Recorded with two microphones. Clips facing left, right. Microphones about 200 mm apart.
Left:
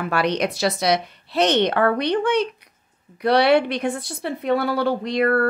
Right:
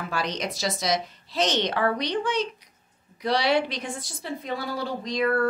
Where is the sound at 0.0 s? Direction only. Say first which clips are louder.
Left 8 dB; 65° left (ahead or behind).